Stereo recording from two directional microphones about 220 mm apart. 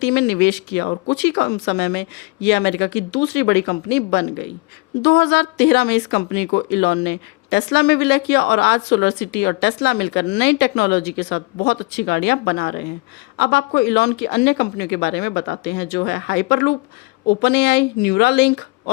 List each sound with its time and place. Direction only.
0.0 s speech: 50° left (ahead or behind)